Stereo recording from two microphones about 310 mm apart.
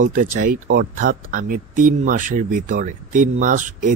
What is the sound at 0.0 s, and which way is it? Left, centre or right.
Speech, right.